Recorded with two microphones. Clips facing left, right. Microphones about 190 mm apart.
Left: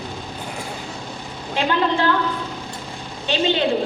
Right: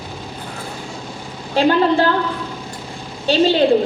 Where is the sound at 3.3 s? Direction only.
35° right (ahead or behind).